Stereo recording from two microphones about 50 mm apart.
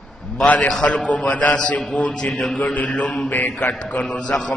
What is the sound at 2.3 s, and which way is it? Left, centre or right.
Speech, centre.